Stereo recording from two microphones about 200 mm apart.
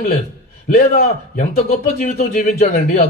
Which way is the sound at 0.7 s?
35° left (ahead or behind).